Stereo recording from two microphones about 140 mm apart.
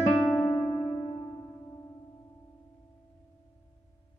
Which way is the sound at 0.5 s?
20° left (ahead or behind).